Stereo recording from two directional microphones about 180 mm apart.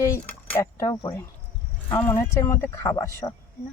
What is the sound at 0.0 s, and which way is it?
Speech, 15° left (ahead or behind).